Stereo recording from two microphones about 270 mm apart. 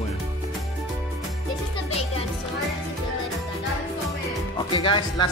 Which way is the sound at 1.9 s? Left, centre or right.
Left.